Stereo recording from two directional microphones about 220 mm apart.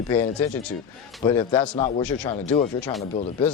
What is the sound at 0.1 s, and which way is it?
A man's voice, 10° left (ahead or behind).